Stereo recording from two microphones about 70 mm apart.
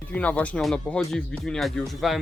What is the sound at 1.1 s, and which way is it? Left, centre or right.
Speech, centre.